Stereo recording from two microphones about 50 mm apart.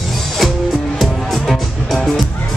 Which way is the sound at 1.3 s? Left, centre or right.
Centre.